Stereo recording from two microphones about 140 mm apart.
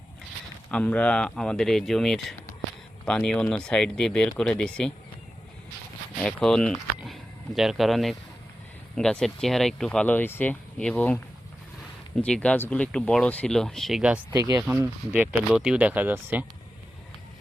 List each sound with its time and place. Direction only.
0.7 s speech: 10° left (ahead or behind)
6.1 s speech: 5° left (ahead or behind)
14.3 s speech: 25° right (ahead or behind)
15.1 s speech: 10° right (ahead or behind)